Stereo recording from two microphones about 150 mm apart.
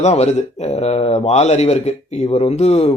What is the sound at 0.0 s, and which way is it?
Speech, 45° left (ahead or behind).